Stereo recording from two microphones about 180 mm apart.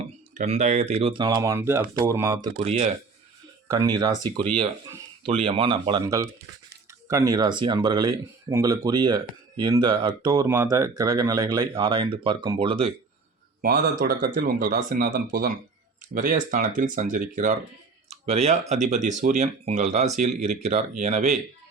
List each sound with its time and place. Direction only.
0.3 s speech: 40° right (ahead or behind); by 2.5 s 20° right (ahead or behind)
2.6 s speech: 35° right (ahead or behind)
3.7 s speech: 20° right (ahead or behind)
7.1 s speech: 20° right (ahead or behind)
13.6 s speech: 55° right (ahead or behind)
18.1 s a sound: 35° right (ahead or behind)
18.7 s speech: 40° right (ahead or behind)